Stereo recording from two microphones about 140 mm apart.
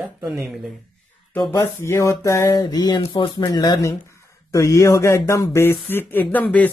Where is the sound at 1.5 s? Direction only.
20° left (ahead or behind).